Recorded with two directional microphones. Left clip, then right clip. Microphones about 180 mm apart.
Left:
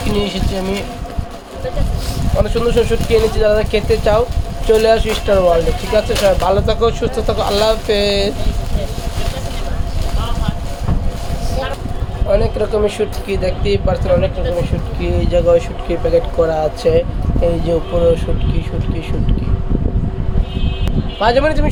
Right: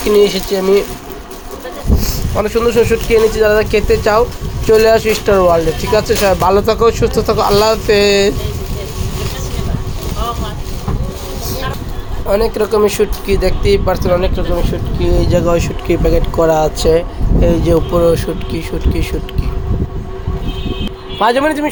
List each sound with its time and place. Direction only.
0.5 s speech: 30° right (ahead or behind)
2.4 s speech: 25° right (ahead or behind)
12.3 s speech: 40° right (ahead or behind)
21.2 s speech: 30° right (ahead or behind)